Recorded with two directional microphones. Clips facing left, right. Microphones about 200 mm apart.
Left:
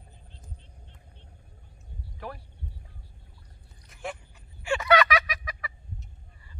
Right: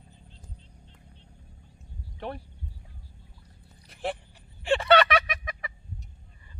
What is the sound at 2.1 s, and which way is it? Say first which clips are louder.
Speech: right 4 dB; 25° right (ahead or behind).